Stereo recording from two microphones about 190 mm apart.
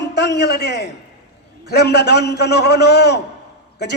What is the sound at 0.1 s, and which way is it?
A man's voice, 60° left (ahead or behind).